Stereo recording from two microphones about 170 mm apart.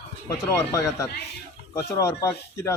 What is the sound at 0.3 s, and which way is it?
Speech, 20° left (ahead or behind).